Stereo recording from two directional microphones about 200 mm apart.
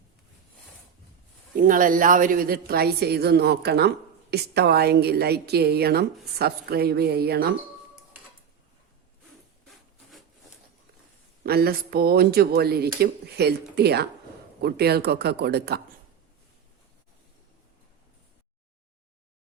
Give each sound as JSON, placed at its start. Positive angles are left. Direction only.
{"t": 1.5, "sound": "a woman's voice", "side_deg": -45}
{"t": 11.4, "sound": "a woman's voice", "side_deg": -50}